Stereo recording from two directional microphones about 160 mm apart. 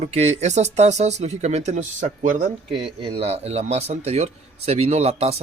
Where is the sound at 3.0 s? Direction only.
40° right (ahead or behind).